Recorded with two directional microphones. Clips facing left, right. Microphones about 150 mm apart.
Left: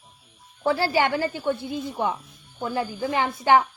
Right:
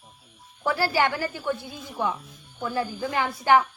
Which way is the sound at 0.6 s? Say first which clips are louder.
Left 2 dB; 25° left (ahead or behind).